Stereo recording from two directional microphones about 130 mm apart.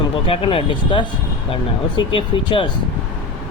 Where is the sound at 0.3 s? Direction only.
45° left (ahead or behind).